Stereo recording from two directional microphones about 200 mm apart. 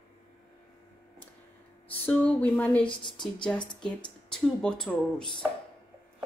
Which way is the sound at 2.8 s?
25° left (ahead or behind).